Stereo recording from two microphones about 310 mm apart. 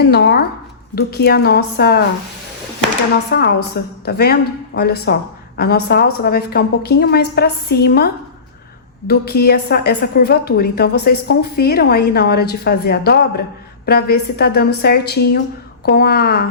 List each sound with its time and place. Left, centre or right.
0.0 s a woman's voice: left
3.2 s a woman's voice: left